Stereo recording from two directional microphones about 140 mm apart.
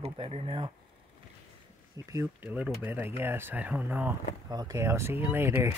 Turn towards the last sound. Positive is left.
turn(degrees=-15)  # may be behind; listen again after turning